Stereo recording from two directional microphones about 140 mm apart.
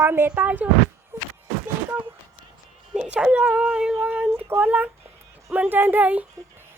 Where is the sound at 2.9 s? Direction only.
5° right (ahead or behind).